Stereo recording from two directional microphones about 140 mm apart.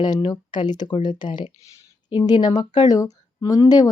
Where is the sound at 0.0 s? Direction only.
30° left (ahead or behind).